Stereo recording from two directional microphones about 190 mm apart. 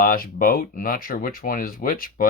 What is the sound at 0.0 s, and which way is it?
Speech, 50° left (ahead or behind).